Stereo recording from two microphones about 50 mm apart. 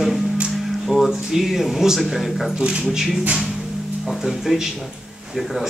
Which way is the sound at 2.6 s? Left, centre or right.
Centre.